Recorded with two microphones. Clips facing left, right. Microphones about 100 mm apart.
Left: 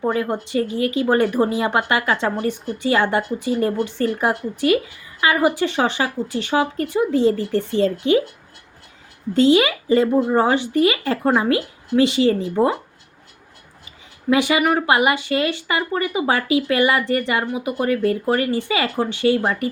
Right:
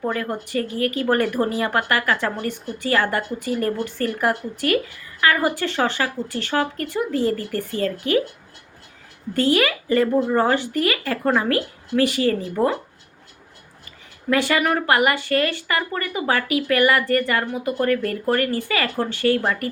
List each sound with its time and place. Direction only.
0.0 s a woman's voice: 20° left (ahead or behind)
9.3 s speech: 20° left (ahead or behind)
14.3 s a woman's voice: 15° left (ahead or behind)